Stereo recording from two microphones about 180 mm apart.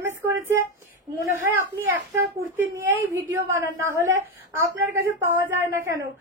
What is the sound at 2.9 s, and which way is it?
Speech, 10° right (ahead or behind).